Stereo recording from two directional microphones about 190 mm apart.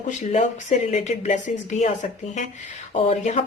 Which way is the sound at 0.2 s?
35° left (ahead or behind).